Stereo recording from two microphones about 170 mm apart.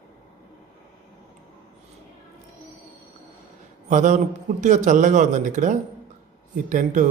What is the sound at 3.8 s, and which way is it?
A man's voice, 45° right (ahead or behind).